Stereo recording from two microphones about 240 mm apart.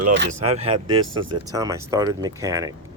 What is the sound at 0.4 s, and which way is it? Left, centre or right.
Speech, right.